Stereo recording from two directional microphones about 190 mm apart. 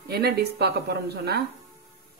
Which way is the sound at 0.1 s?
55° right (ahead or behind).